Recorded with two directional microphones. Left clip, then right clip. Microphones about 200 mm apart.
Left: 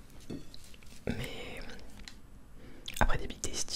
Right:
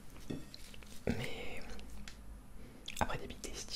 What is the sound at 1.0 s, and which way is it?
Whispering, 10° left (ahead or behind).